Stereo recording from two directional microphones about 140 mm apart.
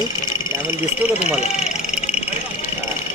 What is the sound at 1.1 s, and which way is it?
Speech, 50° left (ahead or behind).